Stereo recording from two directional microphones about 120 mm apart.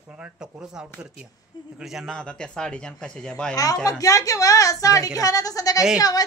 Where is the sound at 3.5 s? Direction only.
30° left (ahead or behind).